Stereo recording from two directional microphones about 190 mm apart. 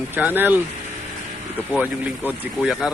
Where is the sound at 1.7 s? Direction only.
10° right (ahead or behind).